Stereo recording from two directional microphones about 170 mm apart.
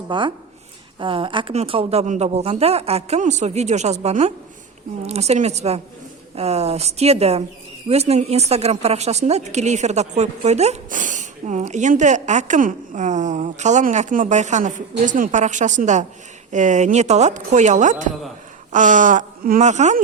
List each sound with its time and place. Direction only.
0.1 s a woman's voice: 30° right (ahead or behind); by 20.0 s 45° right (ahead or behind)